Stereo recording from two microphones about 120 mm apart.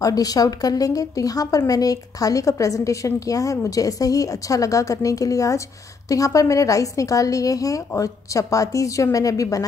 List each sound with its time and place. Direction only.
0.0 s a woman's voice: 30° left (ahead or behind)